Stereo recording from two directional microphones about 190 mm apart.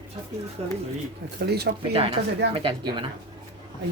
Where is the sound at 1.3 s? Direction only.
60° right (ahead or behind).